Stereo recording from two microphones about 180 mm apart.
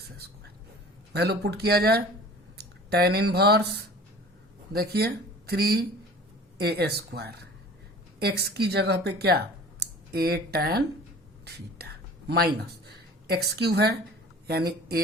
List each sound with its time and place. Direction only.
1.1 s speech: 65° right (ahead or behind)
11.4 s whispering: 60° right (ahead or behind)
13.2 s speech: 60° right (ahead or behind)